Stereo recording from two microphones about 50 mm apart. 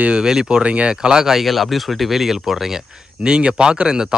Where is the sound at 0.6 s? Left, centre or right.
Right; by 2.7 s centre.